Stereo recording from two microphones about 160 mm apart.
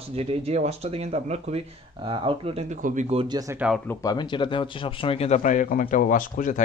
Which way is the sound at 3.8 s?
25° left (ahead or behind).